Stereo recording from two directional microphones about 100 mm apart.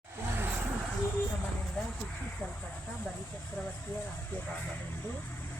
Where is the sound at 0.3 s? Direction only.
20° right (ahead or behind).